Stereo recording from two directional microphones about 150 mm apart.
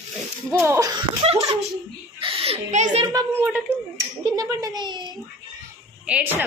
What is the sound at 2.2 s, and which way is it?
Speech, 40° right (ahead or behind).